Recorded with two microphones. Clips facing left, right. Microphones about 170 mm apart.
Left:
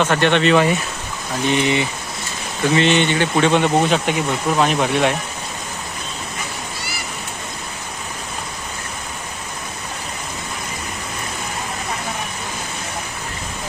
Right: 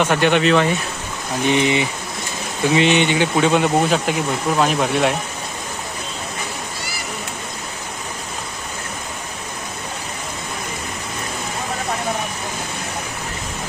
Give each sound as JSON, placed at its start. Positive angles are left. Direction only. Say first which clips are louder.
{"t": 0.0, "sound": "speech", "louder": "even", "side_deg": -10}
{"t": 1.5, "sound": "speech", "louder": "right 1 dB", "side_deg": -15}